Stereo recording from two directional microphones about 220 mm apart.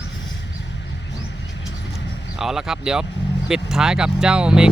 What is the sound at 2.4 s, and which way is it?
Speech, centre (ahead or behind).